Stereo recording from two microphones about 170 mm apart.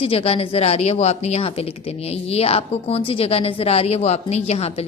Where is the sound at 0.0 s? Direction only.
35° left (ahead or behind).